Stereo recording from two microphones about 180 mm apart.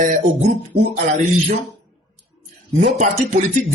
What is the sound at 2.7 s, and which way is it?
Speech, 40° right (ahead or behind).